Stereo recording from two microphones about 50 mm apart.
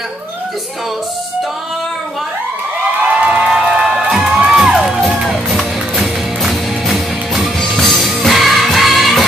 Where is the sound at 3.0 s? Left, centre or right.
Right.